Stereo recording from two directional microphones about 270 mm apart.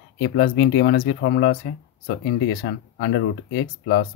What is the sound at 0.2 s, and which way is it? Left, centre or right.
Speech, left.